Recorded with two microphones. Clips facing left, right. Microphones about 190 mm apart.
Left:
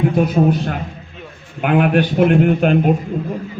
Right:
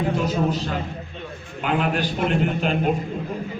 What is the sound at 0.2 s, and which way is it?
A man's voice, 60° left (ahead or behind).